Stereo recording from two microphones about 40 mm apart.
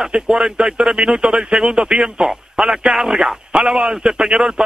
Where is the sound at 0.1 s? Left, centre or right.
Centre.